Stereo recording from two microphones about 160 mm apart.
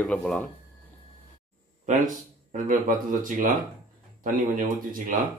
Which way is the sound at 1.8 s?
50° right (ahead or behind).